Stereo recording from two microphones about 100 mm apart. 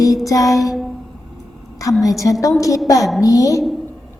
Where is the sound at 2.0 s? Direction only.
30° left (ahead or behind).